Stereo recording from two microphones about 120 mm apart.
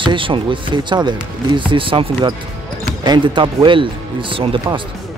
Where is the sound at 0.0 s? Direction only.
45° right (ahead or behind).